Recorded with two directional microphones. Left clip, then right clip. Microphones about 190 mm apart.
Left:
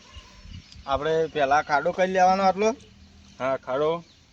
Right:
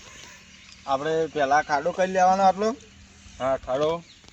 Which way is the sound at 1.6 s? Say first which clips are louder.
Even; 20° left (ahead or behind).